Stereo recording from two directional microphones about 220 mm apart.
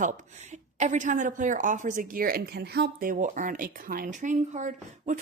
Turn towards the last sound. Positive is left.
turn(degrees=-35)  # may be behind; listen again after turning